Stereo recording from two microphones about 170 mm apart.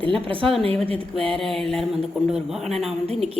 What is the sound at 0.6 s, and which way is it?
Speech, 35° right (ahead or behind).